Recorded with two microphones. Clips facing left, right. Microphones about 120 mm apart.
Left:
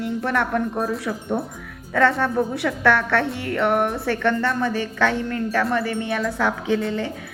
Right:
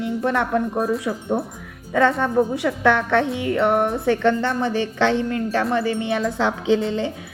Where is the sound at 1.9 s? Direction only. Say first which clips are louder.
Right 1 dB; 15° right (ahead or behind).